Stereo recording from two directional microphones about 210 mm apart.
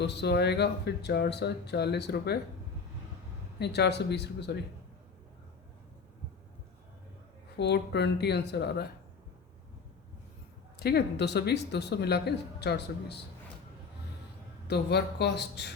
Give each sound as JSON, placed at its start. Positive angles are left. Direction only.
{"t": 0.0, "sound": "speech", "side_deg": 55}
{"t": 3.6, "sound": "speech", "side_deg": 50}
{"t": 7.5, "sound": "speech", "side_deg": 55}
{"t": 10.8, "sound": "speech", "side_deg": 50}
{"t": 14.7, "sound": "speech", "side_deg": 50}